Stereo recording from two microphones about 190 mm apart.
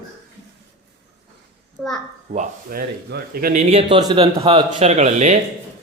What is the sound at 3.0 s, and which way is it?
Speech, 55° right (ahead or behind).